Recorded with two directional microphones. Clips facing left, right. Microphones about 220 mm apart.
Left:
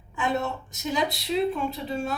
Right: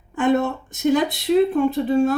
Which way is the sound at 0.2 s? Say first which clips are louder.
Right 9 dB; 50° right (ahead or behind).